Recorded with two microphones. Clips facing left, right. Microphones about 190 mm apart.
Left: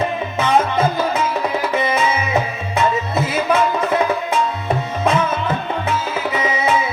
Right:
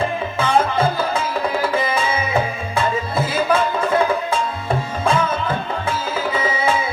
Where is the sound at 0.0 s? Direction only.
30° right (ahead or behind).